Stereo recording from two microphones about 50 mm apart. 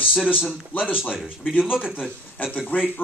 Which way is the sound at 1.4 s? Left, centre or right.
Left.